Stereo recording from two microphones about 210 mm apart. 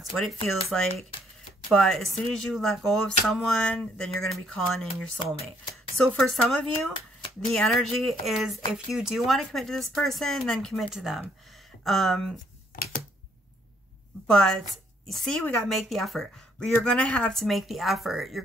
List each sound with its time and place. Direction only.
0.1 s speech: centre (ahead or behind)
6.0 s speech: centre (ahead or behind)
12.7 s typewriter: 40° left (ahead or behind)
14.2 s speech: 5° left (ahead or behind)